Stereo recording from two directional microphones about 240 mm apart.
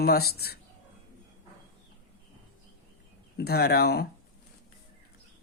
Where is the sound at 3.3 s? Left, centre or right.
Left.